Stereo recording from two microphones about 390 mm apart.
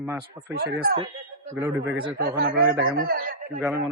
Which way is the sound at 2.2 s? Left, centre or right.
Right.